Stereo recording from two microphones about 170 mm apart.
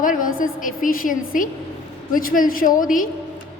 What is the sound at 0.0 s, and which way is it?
A woman's voice, 55° left (ahead or behind).